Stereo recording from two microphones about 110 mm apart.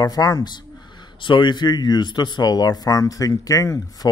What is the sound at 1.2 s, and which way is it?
Speech, 45° left (ahead or behind).